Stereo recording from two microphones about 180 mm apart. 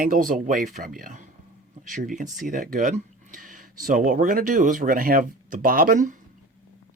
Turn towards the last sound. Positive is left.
turn(degrees=-50)  # may be behind; listen again after turning